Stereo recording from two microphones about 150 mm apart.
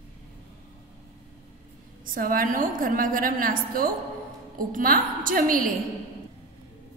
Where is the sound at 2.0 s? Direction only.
65° right (ahead or behind).